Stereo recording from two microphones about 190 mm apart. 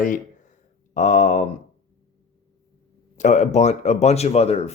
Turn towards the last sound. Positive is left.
turn(degrees=35)  # may be behind; listen again after turning